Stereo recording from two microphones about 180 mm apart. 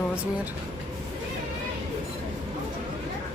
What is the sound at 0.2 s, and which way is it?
Speech, 10° right (ahead or behind).